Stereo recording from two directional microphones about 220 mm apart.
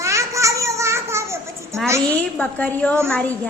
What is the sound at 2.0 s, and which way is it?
A woman's voice, 5° left (ahead or behind).